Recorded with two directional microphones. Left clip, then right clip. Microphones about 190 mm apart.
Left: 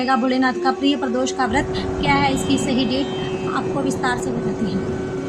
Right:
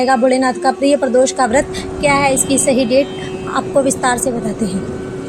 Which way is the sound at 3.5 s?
30° right (ahead or behind).